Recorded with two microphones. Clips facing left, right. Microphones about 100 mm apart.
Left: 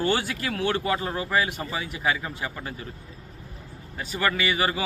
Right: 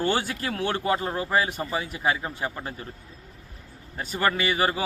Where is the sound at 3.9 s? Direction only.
35° right (ahead or behind).